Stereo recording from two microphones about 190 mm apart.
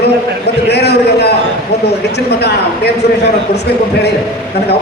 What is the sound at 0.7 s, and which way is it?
Speech, 60° left (ahead or behind).